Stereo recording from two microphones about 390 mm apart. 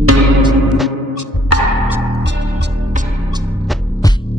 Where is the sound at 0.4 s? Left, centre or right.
Centre.